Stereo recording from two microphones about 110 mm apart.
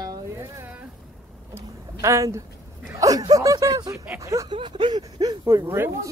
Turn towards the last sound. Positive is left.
turn(degrees=-25)  # may be behind; listen again after turning